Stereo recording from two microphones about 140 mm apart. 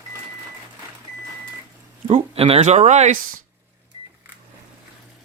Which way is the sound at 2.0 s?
45° right (ahead or behind).